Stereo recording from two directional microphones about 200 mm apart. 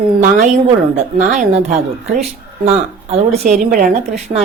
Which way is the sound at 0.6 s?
35° right (ahead or behind).